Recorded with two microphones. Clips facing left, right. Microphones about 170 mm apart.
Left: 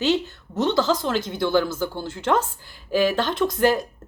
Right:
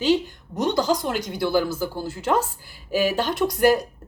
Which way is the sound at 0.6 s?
15° right (ahead or behind).